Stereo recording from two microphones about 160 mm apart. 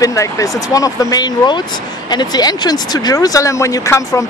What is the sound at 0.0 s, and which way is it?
Speech, 20° left (ahead or behind).